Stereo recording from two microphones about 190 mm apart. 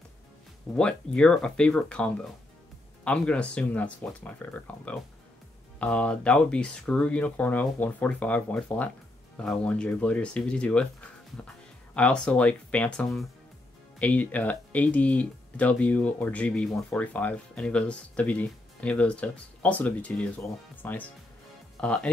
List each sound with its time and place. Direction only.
0.7 s speech: 5° left (ahead or behind)